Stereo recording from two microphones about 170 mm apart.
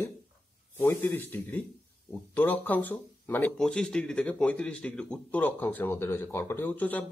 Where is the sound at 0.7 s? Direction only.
10° left (ahead or behind).